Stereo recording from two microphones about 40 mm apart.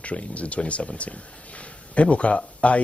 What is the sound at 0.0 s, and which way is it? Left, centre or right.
Speech, left.